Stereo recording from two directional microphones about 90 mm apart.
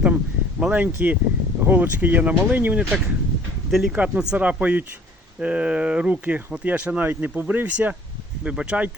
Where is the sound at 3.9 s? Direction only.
15° right (ahead or behind).